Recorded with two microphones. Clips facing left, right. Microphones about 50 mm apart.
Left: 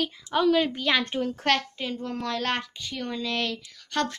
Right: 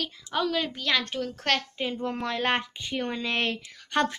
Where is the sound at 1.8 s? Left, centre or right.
Centre.